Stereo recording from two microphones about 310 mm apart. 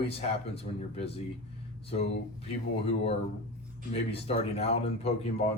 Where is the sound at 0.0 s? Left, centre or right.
Centre.